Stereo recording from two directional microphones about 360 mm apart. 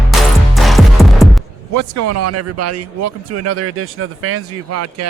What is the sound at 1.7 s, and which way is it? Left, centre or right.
Speech, right.